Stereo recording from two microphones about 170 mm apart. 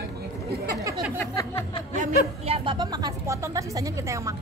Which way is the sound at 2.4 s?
30° right (ahead or behind).